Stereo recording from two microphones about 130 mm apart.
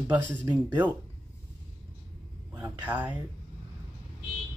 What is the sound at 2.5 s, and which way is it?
Speech, 15° right (ahead or behind).